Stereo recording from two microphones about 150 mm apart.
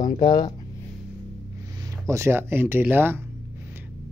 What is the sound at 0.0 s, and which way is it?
Speech, 25° left (ahead or behind).